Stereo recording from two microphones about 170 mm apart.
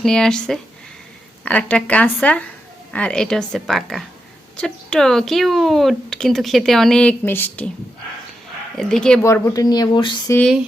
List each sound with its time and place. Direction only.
0.0 s speech: 5° left (ahead or behind)
8.8 s speech: 5° left (ahead or behind)
9.2 s speech: 20° left (ahead or behind)